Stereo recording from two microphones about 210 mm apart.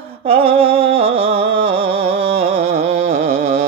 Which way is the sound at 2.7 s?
30° right (ahead or behind).